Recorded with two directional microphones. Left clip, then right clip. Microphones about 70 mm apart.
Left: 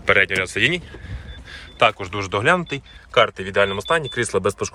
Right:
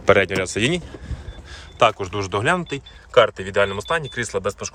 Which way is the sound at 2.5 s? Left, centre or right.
Centre.